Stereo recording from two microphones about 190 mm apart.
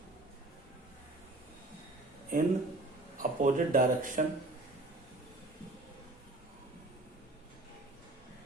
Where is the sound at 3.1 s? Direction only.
45° right (ahead or behind).